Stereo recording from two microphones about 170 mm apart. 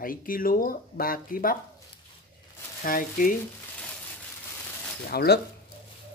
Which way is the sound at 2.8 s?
55° left (ahead or behind).